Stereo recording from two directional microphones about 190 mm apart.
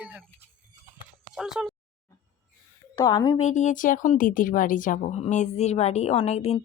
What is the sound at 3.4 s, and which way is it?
A woman's voice, 40° left (ahead or behind).